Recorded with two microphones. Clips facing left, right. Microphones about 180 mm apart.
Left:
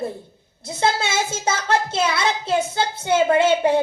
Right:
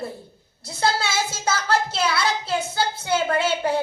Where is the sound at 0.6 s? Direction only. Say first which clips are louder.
Left 2 dB; 20° left (ahead or behind).